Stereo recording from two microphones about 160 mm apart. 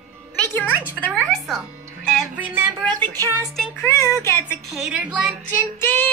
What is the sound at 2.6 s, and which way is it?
Speech, 15° right (ahead or behind).